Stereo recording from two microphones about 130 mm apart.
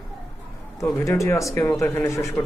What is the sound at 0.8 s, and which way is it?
A man's voice, 20° left (ahead or behind).